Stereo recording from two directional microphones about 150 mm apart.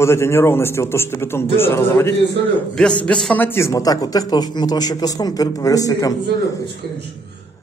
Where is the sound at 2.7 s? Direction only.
5° left (ahead or behind); by 6.1 s 25° left (ahead or behind).